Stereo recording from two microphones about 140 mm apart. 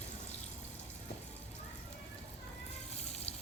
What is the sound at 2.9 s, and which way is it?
Water, 50° left (ahead or behind).